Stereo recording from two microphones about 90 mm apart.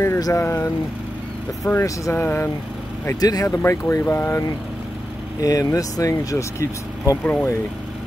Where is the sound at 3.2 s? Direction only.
45° left (ahead or behind); by 4.3 s 30° left (ahead or behind).